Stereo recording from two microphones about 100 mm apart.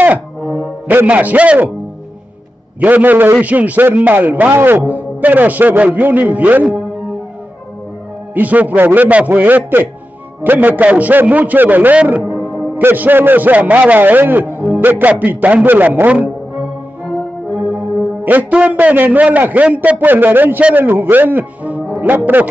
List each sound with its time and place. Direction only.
0.4 s music: 5° right (ahead or behind)
0.8 s a man's voice: 15° right (ahead or behind)
2.8 s a man's voice: 15° right (ahead or behind)
8.4 s a man's voice: 15° right (ahead or behind)
17.5 s music: centre (ahead or behind)
18.2 s a man's voice: 15° right (ahead or behind)